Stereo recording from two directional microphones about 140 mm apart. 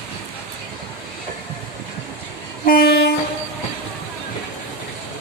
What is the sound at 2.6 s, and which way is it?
Train, 90° left.